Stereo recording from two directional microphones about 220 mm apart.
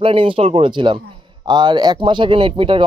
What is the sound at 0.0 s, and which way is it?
A man's voice, 25° right (ahead or behind).